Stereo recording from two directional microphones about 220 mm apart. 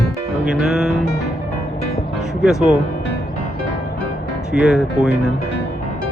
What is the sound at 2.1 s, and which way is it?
Music, centre (ahead or behind).